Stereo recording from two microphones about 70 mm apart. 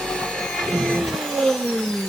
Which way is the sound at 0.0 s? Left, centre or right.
Centre.